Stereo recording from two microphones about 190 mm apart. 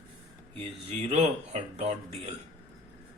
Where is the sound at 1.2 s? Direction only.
35° right (ahead or behind).